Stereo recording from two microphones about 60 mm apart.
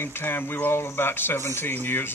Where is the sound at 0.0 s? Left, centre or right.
Left.